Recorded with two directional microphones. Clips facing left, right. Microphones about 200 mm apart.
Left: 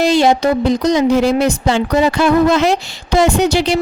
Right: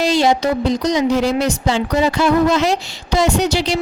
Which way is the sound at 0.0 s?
55° left (ahead or behind).